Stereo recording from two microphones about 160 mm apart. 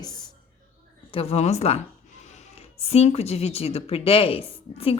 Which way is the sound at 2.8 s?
40° left (ahead or behind).